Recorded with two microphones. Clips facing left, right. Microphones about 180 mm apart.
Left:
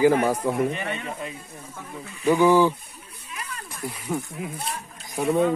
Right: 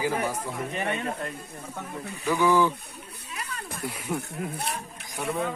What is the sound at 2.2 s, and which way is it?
Speech, 20° left (ahead or behind).